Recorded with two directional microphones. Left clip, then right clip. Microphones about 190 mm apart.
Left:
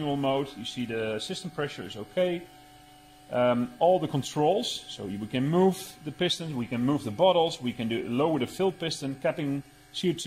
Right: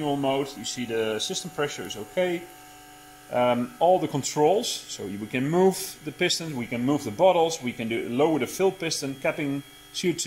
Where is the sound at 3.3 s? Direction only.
30° left (ahead or behind).